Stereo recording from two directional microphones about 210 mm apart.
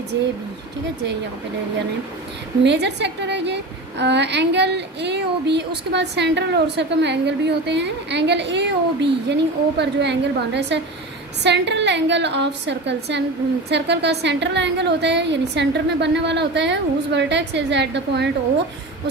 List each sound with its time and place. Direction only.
2.6 s a woman's voice: 55° right (ahead or behind)